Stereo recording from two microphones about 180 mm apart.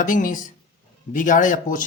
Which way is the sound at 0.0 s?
45° left (ahead or behind).